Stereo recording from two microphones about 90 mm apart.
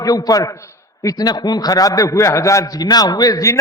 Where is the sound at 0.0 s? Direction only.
45° left (ahead or behind).